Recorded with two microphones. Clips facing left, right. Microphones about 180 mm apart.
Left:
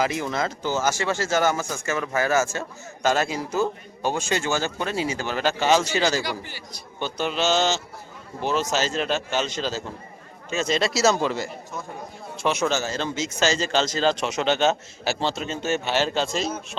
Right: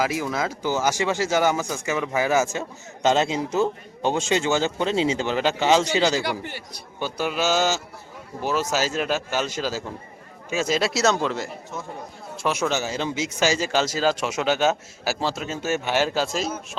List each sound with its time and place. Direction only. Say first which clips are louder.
0.0 s speech: even; 5° right (ahead or behind)
6.2 s speech: right 3 dB; 60° right (ahead or behind)
7.0 s speech: even; 5° right (ahead or behind)